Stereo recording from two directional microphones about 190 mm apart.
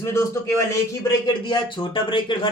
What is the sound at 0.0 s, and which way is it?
Speech, 15° left (ahead or behind).